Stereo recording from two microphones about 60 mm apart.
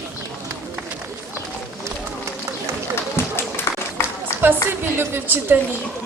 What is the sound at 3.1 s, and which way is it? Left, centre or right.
Run, left.